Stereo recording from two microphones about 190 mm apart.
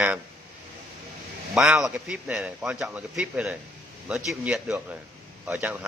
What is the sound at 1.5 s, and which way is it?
A man's voice, centre (ahead or behind).